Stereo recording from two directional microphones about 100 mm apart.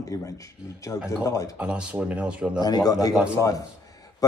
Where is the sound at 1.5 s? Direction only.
10° right (ahead or behind).